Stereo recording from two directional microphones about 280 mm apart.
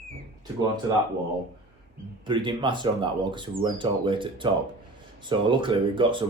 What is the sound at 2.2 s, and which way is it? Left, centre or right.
Speech, centre.